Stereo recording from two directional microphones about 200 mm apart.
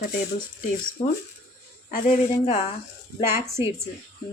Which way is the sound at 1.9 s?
40° left (ahead or behind).